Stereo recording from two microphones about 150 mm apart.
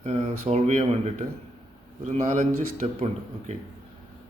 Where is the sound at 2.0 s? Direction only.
50° right (ahead or behind).